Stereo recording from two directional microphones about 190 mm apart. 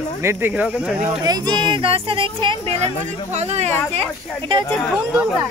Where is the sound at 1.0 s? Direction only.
20° right (ahead or behind).